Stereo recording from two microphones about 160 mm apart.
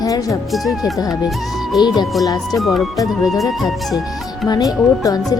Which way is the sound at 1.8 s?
25° left (ahead or behind).